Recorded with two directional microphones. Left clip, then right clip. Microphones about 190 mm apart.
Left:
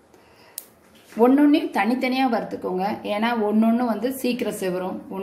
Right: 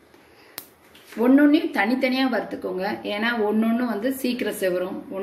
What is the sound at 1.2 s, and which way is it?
Speech, 55° left (ahead or behind).